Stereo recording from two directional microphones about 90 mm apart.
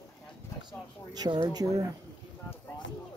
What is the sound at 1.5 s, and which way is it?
Speech, 45° right (ahead or behind).